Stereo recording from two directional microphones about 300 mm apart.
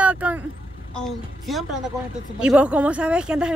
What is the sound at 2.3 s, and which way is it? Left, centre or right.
Speech, centre.